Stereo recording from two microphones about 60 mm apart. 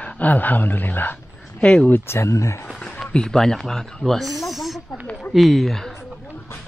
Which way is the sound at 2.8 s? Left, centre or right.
Centre.